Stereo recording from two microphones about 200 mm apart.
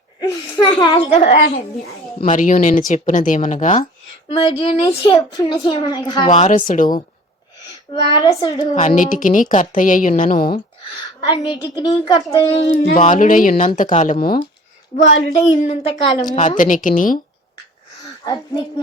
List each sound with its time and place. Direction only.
0.6 s a child's voice: 25° left (ahead or behind)
4.3 s a child's voice: 25° left (ahead or behind)
6.7 s a woman's voice: 45° left (ahead or behind)
8.0 s a child's voice: 20° left (ahead or behind)
8.7 s a woman's voice: 35° left (ahead or behind)
10.9 s a child's voice: 20° left (ahead or behind); by 14.4 s 45° left (ahead or behind)
14.9 s a woman's voice: 35° left (ahead or behind)
15.8 s a child's voice: 25° left (ahead or behind)
16.3 s a woman's voice: 40° left (ahead or behind)